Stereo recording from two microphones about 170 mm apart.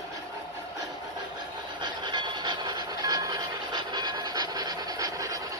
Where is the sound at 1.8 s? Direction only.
25° right (ahead or behind).